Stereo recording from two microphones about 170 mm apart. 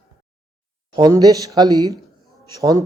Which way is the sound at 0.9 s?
25° right (ahead or behind).